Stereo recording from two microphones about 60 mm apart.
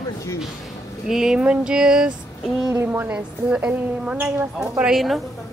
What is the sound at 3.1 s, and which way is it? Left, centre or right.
A woman's voice, right.